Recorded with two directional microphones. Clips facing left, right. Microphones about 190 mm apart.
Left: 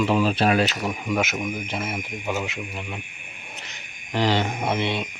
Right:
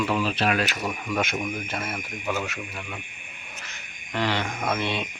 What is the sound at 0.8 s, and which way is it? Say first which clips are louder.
Speech: left 3 dB; 15° left (ahead or behind).